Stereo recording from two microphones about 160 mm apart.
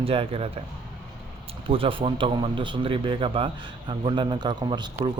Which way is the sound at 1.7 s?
35° right (ahead or behind).